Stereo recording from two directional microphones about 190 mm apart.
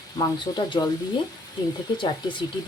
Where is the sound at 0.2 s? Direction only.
20° left (ahead or behind).